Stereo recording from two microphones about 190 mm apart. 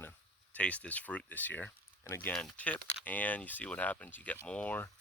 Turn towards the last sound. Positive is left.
turn(degrees=10)  # may be behind; listen again after turning